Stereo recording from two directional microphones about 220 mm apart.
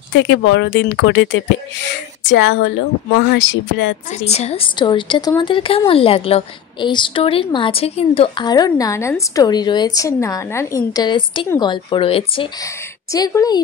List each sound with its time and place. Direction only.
0.1 s speech: 55° left (ahead or behind)
4.1 s a woman's voice: 30° left (ahead or behind)
12.6 s a woman's voice: 15° left (ahead or behind)